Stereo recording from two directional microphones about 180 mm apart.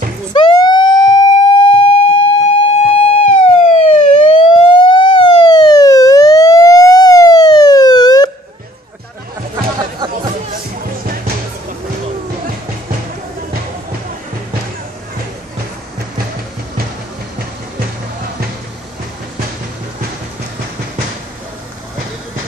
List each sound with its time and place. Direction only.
0.3 s emergency vehicle: 25° left (ahead or behind)
3.7 s police car: 30° left (ahead or behind)
9.8 s music: 25° right (ahead or behind)